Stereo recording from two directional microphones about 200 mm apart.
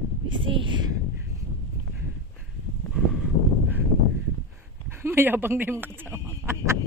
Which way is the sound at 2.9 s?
5° right (ahead or behind).